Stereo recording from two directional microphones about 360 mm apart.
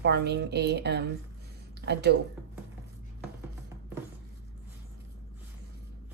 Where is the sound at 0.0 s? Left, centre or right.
Right.